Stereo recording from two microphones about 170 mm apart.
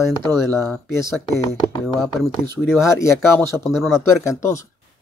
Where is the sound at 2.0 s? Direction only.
5° right (ahead or behind).